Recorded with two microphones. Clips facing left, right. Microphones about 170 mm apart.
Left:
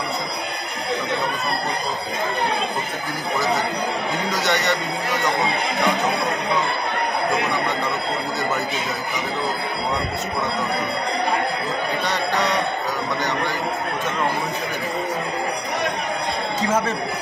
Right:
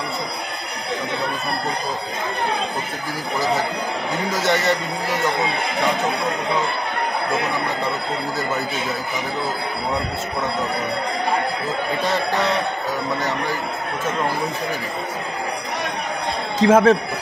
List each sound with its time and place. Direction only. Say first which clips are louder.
4.3 s speech: right 3 dB; 25° right (ahead or behind)
16.6 s a man's voice: right 10 dB; 90° right